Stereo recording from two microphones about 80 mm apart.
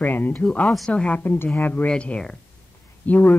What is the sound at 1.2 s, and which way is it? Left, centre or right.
Speech, left.